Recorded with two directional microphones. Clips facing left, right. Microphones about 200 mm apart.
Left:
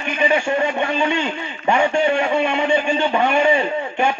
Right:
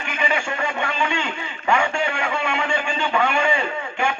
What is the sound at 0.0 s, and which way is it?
A man's voice, 25° left (ahead or behind).